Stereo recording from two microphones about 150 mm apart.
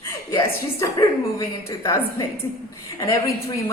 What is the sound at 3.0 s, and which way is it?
Speech, 20° left (ahead or behind).